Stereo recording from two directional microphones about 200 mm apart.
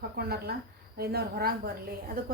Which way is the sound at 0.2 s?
50° right (ahead or behind).